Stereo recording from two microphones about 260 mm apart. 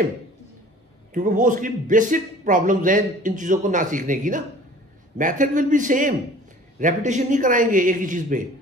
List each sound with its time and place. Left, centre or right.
1.1 s speech: right